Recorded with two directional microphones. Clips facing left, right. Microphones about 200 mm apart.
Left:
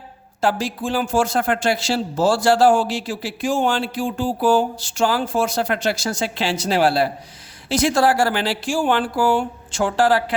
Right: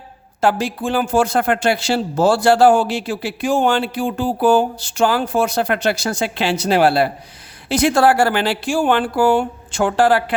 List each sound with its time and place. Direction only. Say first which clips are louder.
0.4 s speech: right 3 dB; 60° right (ahead or behind)